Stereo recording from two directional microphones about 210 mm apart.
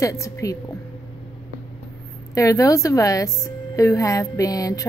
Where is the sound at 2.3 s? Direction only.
15° left (ahead or behind).